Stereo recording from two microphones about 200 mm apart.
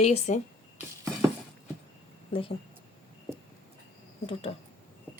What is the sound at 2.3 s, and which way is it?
Speech, 25° left (ahead or behind).